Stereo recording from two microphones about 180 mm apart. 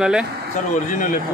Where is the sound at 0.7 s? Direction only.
45° left (ahead or behind).